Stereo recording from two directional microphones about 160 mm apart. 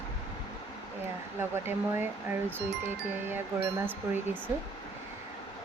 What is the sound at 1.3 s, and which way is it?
Chime, 15° right (ahead or behind).